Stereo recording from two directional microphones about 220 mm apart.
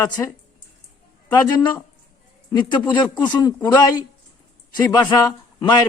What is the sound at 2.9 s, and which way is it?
A man's voice, 20° left (ahead or behind).